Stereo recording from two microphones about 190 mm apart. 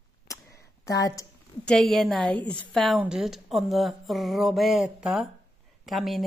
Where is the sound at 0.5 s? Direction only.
15° left (ahead or behind).